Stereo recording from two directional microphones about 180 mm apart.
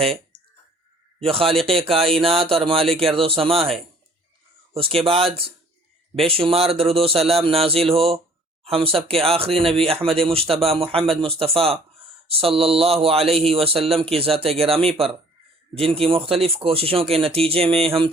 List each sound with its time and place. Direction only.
1.2 s speech: 30° right (ahead or behind)
4.7 s speech: 30° right (ahead or behind)